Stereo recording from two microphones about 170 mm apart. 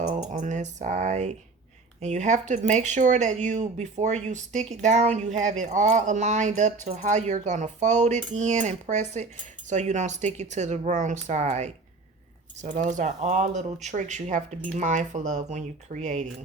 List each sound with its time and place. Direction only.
0.0 s speech: 45° right (ahead or behind)